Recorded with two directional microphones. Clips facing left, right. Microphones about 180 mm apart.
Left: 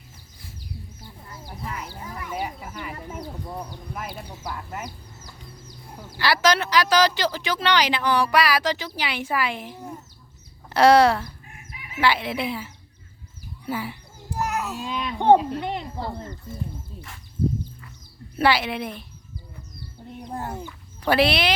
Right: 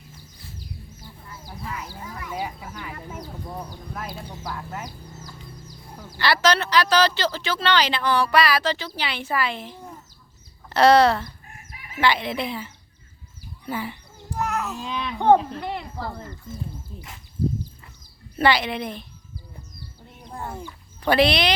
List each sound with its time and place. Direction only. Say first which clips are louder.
2.3 s speech: even; 5° left (ahead or behind)
6.1 s speech: even; 10° left (ahead or behind)
13.7 s babbling: even; 5° left (ahead or behind)
15.2 s speech: left 1 dB; 20° left (ahead or behind)
18.3 s speech: even; 5° left (ahead or behind)
20.6 s speech: left 1 dB; 5° left (ahead or behind)